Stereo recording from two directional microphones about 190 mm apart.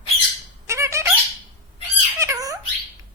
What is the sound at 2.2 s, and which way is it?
Squeak, 15° right (ahead or behind).